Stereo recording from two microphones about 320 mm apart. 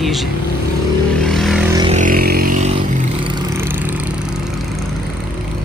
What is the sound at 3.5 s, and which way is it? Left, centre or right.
Vehicle, centre.